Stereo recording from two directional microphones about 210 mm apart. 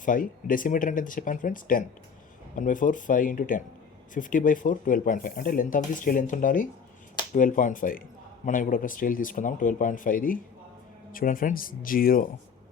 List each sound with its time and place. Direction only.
0.0 s speech: 40° left (ahead or behind)